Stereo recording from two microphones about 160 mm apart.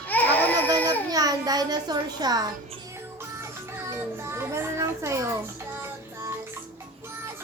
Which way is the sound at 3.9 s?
15° right (ahead or behind).